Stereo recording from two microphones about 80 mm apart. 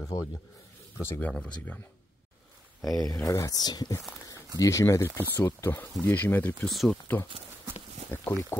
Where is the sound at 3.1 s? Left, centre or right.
Left.